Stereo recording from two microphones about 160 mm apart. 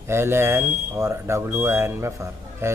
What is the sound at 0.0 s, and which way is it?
Speech, 15° right (ahead or behind).